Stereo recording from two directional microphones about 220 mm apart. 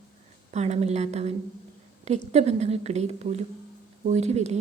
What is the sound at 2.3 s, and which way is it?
Speech, 30° right (ahead or behind).